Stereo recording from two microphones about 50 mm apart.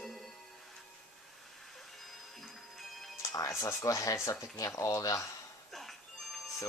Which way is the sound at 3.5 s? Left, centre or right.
Left.